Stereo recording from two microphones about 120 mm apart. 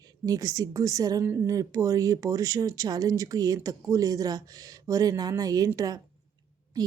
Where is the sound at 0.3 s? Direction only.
30° right (ahead or behind).